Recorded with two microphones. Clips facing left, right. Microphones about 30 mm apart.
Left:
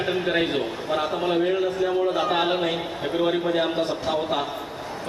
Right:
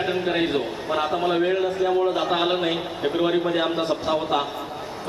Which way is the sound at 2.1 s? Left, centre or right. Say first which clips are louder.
Even; right.